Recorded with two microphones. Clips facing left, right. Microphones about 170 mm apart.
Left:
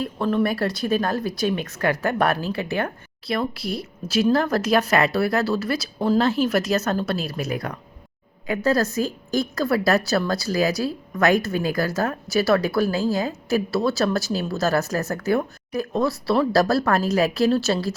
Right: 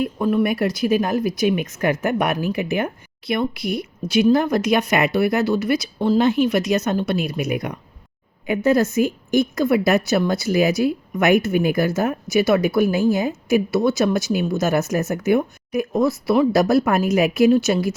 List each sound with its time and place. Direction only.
0.0 s a woman's voice: 10° right (ahead or behind)
3.6 s speech: centre (ahead or behind)
4.4 s a woman's voice: 15° right (ahead or behind)
6.4 s speech: 35° left (ahead or behind)
6.7 s a woman's voice: 15° right (ahead or behind)